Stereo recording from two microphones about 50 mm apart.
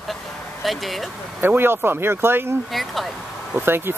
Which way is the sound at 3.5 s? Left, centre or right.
Right.